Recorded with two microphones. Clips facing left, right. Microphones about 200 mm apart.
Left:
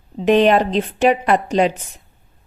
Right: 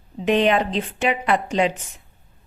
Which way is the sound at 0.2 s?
40° left (ahead or behind).